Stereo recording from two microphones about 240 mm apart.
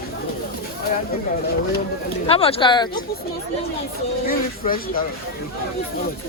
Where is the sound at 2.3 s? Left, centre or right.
Left.